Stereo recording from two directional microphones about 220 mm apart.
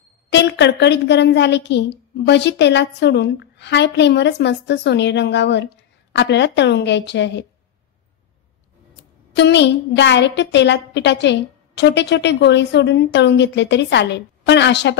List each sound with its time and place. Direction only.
0.3 s a woman's voice: 50° left (ahead or behind)
8.9 s a woman's voice: 50° left (ahead or behind)